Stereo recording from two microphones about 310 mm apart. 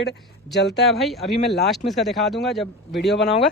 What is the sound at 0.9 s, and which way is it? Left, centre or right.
Speech, centre.